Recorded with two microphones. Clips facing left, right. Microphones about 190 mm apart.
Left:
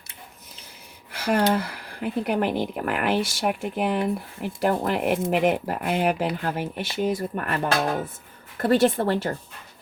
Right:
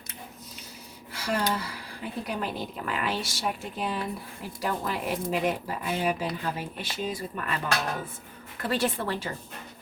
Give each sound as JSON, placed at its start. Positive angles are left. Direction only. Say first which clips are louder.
{"t": 1.1, "sound": "speech", "louder": "left 7 dB", "side_deg": 60}